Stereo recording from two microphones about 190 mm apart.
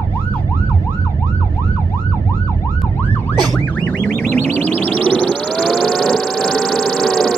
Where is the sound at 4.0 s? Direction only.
10° left (ahead or behind).